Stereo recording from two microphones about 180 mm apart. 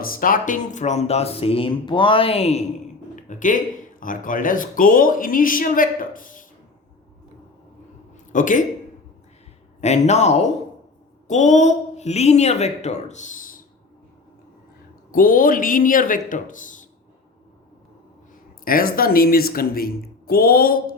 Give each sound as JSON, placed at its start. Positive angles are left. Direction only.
{"t": 0.0, "sound": "speech", "side_deg": 50}
{"t": 8.3, "sound": "speech", "side_deg": 45}
{"t": 9.8, "sound": "speech", "side_deg": 40}
{"t": 15.1, "sound": "speech", "side_deg": 50}
{"t": 18.6, "sound": "speech", "side_deg": 55}